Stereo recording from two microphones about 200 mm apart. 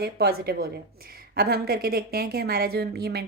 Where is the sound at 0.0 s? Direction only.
50° right (ahead or behind).